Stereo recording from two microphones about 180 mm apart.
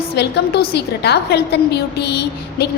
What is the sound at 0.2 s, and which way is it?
A woman's voice, 65° left (ahead or behind).